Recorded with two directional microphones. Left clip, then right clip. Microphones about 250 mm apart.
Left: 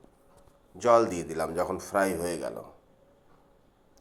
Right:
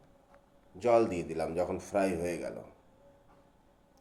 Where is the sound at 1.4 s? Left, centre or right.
Centre.